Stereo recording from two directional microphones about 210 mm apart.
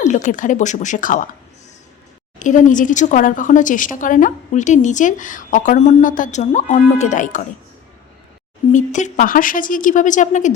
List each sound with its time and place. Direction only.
0.0 s speech: 35° left (ahead or behind)
2.4 s speech: 35° left (ahead or behind)
8.7 s speech: 35° left (ahead or behind)